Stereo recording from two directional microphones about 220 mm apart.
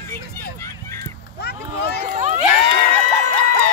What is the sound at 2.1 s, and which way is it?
Crowd, 30° right (ahead or behind).